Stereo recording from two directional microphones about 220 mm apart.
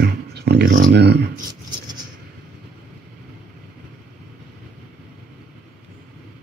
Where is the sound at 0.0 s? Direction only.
50° right (ahead or behind).